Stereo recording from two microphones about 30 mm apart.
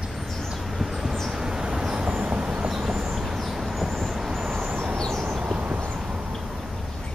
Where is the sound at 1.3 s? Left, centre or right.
Right.